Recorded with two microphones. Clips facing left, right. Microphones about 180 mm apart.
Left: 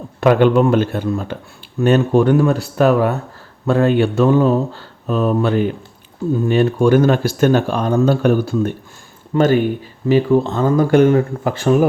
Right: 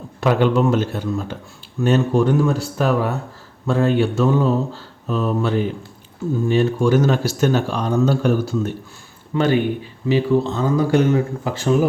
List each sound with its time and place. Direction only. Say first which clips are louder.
0.2 s speech: left 5 dB; 55° left (ahead or behind)
9.3 s speech: left 4 dB; 45° left (ahead or behind)